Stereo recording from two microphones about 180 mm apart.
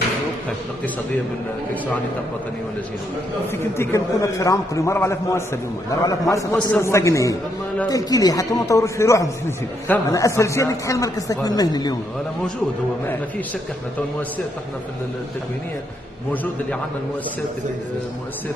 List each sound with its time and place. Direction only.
3.5 s a man's voice: 15° left (ahead or behind)